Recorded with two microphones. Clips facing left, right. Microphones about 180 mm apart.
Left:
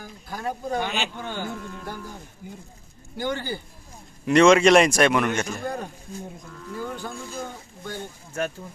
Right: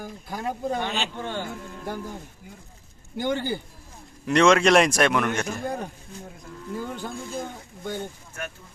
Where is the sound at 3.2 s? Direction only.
20° right (ahead or behind).